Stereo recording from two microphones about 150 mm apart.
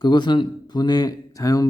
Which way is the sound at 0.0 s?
30° left (ahead or behind).